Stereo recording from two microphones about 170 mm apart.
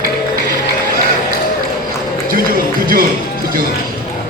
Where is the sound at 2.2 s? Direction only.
55° right (ahead or behind).